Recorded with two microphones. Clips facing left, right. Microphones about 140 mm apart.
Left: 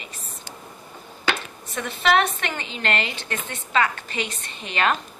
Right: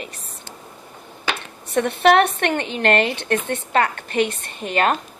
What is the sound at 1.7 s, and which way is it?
A woman's voice, 60° right (ahead or behind).